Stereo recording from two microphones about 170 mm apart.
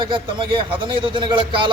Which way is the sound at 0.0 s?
30° right (ahead or behind).